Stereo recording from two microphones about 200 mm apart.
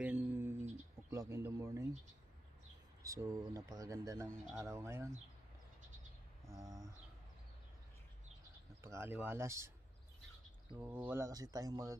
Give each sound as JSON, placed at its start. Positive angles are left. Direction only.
{"t": 0.0, "sound": "a sound", "side_deg": -10}
{"t": 1.3, "sound": "speech", "side_deg": -15}
{"t": 3.0, "sound": "speech", "side_deg": -15}
{"t": 6.4, "sound": "a sound", "side_deg": -15}
{"t": 8.8, "sound": "speech", "side_deg": -15}
{"t": 10.8, "sound": "speech", "side_deg": -10}